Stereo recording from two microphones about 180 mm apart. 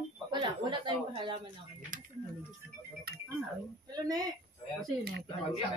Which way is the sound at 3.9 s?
20° right (ahead or behind).